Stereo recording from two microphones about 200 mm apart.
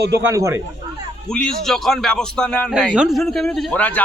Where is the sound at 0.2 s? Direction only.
15° right (ahead or behind).